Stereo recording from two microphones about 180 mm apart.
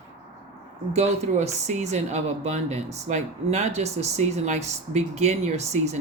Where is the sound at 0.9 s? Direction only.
40° right (ahead or behind).